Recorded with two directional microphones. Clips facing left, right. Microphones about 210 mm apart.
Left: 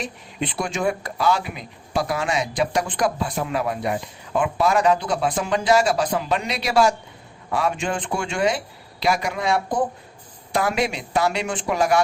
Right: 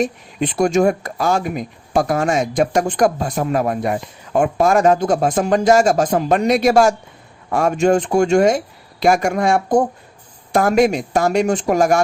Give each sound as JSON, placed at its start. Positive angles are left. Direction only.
{"t": 0.0, "sound": "speech", "side_deg": -45}